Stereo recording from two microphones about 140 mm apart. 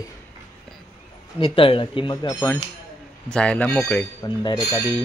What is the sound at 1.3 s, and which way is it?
Speech, 40° left (ahead or behind).